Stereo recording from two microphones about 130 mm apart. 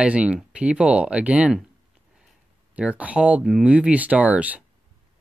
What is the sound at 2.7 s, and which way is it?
Speech, 10° right (ahead or behind).